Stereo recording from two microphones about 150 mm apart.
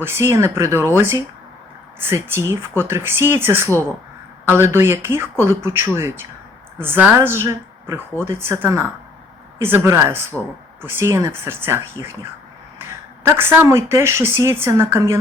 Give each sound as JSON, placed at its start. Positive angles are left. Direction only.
{"t": 0.0, "sound": "speech", "side_deg": -15}
{"t": 13.2, "sound": "speech", "side_deg": -15}